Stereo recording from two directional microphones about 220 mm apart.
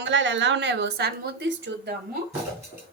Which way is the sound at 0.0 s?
55° right (ahead or behind).